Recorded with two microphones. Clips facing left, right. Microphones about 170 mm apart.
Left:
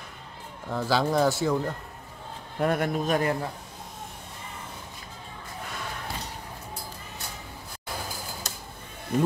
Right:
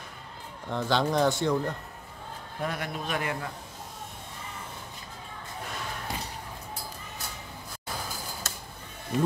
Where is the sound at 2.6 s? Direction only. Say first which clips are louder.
Left 8 dB; 50° left (ahead or behind).